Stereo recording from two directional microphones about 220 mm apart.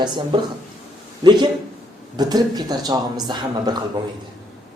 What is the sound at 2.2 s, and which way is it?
Speech, 20° right (ahead or behind).